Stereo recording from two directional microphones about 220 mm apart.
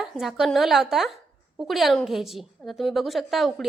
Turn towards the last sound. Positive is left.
turn(degrees=0)  # may be behind; listen again after turning